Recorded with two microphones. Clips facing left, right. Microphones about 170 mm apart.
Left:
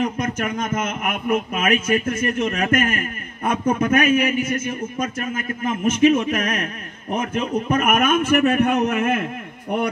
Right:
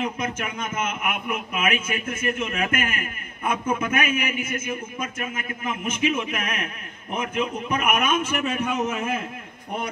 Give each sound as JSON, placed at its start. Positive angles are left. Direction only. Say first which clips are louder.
{"t": 0.0, "sound": "a man's voice", "louder": "left 5 dB", "side_deg": 45}